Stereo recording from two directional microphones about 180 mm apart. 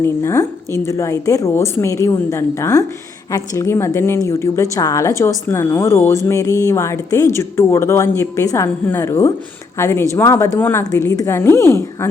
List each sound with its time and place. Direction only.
0.0 s speech: 15° left (ahead or behind)